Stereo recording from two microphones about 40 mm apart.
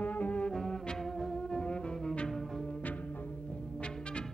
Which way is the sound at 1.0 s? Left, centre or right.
Centre.